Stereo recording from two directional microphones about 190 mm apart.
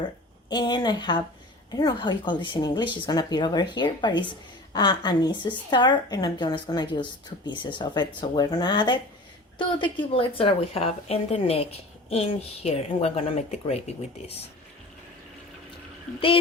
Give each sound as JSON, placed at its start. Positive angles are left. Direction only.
{"t": 0.5, "sound": "a woman's voice", "side_deg": 20}